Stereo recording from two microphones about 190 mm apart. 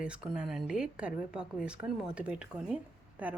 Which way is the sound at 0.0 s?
5° right (ahead or behind).